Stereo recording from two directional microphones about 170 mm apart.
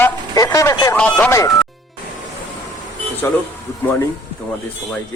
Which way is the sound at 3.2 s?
15° left (ahead or behind).